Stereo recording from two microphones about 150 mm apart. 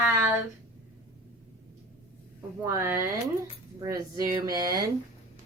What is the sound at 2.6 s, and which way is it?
Speech, 20° right (ahead or behind).